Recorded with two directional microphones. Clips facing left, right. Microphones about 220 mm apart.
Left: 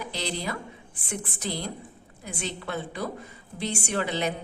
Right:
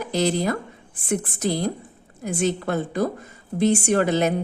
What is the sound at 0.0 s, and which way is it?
A woman's voice, 45° right (ahead or behind).